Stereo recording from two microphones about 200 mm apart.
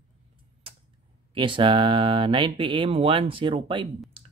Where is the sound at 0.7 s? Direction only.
30° right (ahead or behind).